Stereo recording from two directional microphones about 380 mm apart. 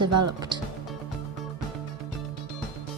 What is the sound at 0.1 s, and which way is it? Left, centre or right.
Speech, right.